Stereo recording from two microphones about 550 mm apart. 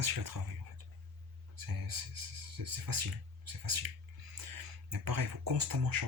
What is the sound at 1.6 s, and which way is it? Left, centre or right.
Speech, right.